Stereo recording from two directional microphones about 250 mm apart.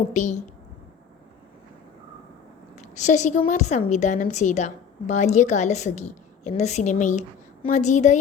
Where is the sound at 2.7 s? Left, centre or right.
Left.